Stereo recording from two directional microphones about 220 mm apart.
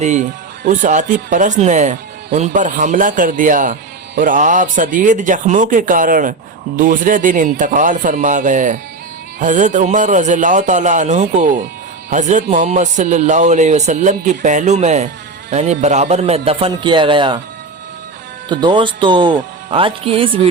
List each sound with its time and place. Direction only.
0.0 s speech: 30° right (ahead or behind)
18.4 s speech: 20° right (ahead or behind)